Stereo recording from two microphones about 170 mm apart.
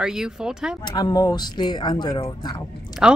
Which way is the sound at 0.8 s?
25° left (ahead or behind).